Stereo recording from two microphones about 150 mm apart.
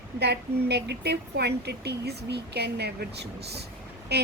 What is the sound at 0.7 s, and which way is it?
Speech, 90° right.